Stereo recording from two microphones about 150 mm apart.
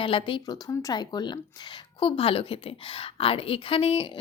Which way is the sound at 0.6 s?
25° left (ahead or behind).